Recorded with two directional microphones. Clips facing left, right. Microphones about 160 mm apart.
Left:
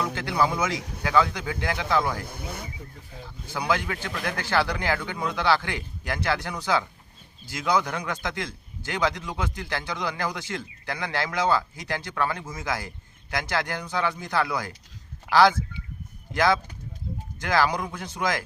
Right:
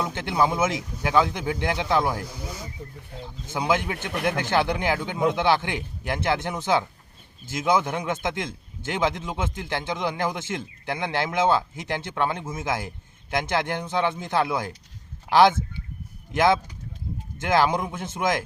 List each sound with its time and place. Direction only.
0.0 s a man's voice: 20° right (ahead or behind)
2.2 s speech: 55° left (ahead or behind)
3.5 s speech: 20° right (ahead or behind)